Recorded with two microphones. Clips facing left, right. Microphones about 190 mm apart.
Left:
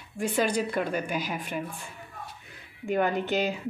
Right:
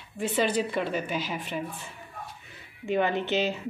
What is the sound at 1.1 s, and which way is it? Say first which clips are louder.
Speech: even; 50° left (ahead or behind).